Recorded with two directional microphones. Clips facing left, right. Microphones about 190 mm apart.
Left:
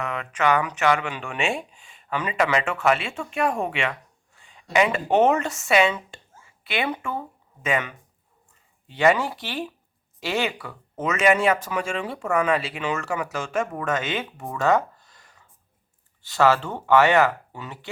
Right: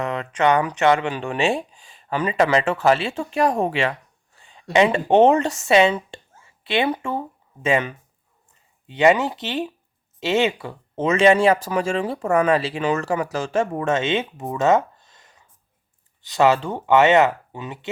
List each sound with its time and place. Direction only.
0.0 s speech: 30° right (ahead or behind)
4.4 s a sound: 30° right (ahead or behind)
4.7 s speech: 25° right (ahead or behind)